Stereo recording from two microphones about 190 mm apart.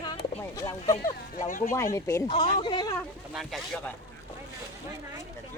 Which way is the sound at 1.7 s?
15° left (ahead or behind).